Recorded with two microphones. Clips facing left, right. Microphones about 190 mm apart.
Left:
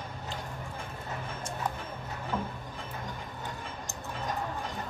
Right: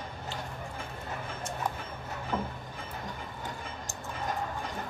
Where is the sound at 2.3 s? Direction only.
20° right (ahead or behind).